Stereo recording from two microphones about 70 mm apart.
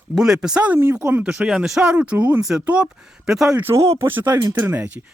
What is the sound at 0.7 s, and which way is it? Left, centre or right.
Speech, right.